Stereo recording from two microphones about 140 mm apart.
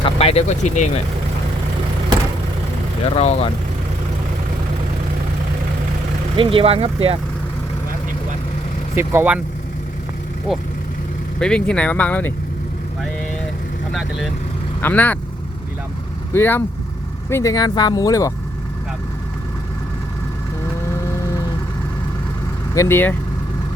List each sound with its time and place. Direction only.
0.0 s speech: 45° left (ahead or behind)
3.2 s speech: 50° left (ahead or behind)
6.3 s speech: 40° right (ahead or behind)
9.0 s speech: 15° right (ahead or behind)
11.3 s speech: 5° left (ahead or behind)
14.8 s speech: 10° left (ahead or behind)
16.3 s speech: 15° left (ahead or behind)
22.7 s speech: 20° left (ahead or behind)